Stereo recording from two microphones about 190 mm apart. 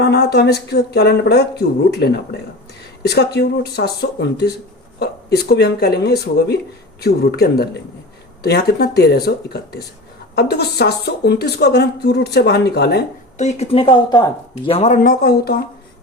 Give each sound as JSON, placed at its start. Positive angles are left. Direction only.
{"t": 0.0, "sound": "speech", "side_deg": 60}
{"t": 13.4, "sound": "speech", "side_deg": 35}
{"t": 14.5, "sound": "speech", "side_deg": 35}